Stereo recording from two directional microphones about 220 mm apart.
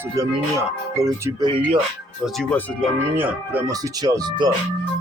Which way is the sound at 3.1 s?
10° right (ahead or behind).